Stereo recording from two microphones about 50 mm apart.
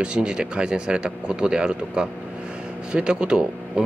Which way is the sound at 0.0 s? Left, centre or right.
Centre.